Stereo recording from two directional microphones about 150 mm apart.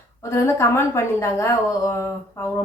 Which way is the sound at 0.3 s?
15° left (ahead or behind).